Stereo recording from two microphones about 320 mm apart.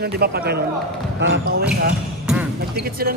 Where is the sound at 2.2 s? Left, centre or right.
Centre.